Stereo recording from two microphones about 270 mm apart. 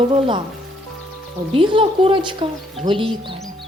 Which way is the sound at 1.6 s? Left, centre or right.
Centre.